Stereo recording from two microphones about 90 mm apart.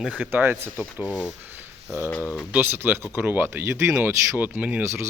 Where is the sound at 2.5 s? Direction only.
25° right (ahead or behind).